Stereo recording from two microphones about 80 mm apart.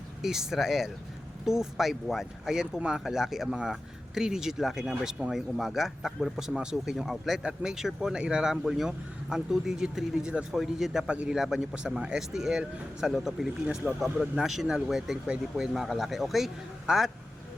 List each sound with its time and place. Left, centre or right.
0.2 s speech: centre
13.7 s speech: centre
14.0 s speech: centre